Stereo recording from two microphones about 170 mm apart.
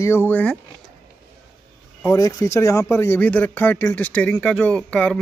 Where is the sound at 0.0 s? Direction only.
15° left (ahead or behind).